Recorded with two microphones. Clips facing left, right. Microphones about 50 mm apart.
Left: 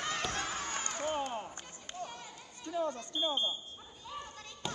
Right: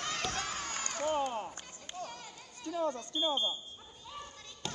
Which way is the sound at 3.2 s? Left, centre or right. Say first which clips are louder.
Right 1 dB; left.